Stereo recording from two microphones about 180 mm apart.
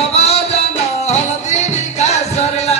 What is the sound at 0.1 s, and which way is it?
Music, 35° left (ahead or behind).